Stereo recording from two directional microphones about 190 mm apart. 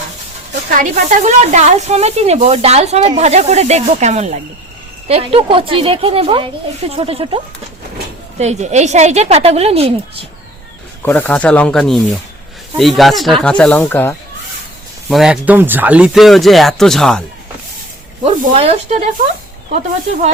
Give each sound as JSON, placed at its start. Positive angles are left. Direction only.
{"t": 0.8, "sound": "a woman's voice", "side_deg": -40}
{"t": 8.4, "sound": "speech", "side_deg": -35}
{"t": 11.0, "sound": "speech", "side_deg": 10}
{"t": 15.1, "sound": "speech", "side_deg": -5}
{"t": 18.2, "sound": "speech", "side_deg": -30}